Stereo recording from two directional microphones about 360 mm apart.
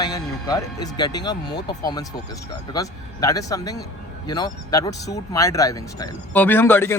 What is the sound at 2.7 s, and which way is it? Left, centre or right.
Speech, centre.